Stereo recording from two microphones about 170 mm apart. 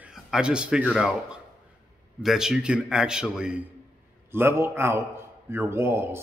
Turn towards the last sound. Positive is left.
turn(degrees=-15)  # may be behind; listen again after turning